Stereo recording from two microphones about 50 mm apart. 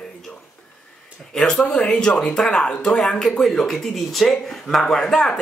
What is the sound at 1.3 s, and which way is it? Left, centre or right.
Speech, centre.